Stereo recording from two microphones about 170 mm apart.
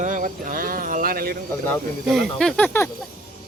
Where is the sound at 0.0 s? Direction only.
50° right (ahead or behind).